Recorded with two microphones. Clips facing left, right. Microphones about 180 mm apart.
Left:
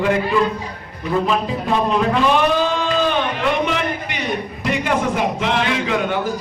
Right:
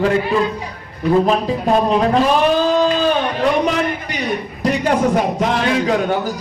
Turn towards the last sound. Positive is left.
turn(degrees=-40)  # may be behind; listen again after turning